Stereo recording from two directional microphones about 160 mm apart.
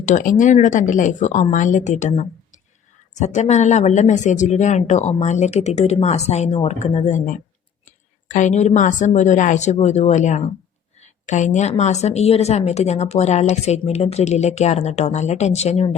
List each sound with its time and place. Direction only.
0.0 s a woman's voice: 50° left (ahead or behind)